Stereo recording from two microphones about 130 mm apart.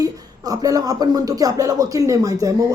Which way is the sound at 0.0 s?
30° right (ahead or behind).